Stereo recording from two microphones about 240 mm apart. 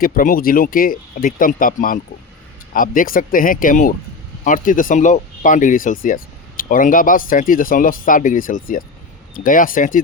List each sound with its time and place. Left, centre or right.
0.0 s speech: left